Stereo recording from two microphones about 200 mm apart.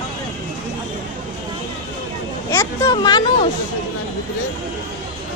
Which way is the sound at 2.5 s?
15° left (ahead or behind).